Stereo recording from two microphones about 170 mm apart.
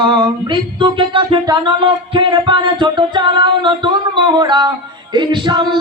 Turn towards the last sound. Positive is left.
turn(degrees=-25)  # may be behind; listen again after turning